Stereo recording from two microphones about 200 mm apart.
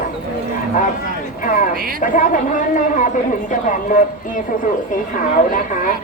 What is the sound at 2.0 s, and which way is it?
A woman's voice, 40° left (ahead or behind).